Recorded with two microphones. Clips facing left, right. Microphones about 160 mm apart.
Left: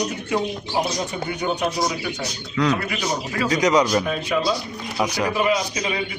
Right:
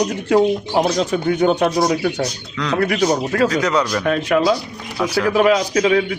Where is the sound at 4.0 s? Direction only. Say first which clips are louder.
Right 6 dB; 70° right (ahead or behind).